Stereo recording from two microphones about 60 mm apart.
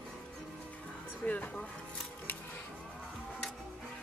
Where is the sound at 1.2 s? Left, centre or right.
Left.